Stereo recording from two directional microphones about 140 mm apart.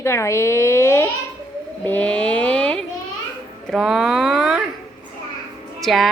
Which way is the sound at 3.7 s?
5° right (ahead or behind).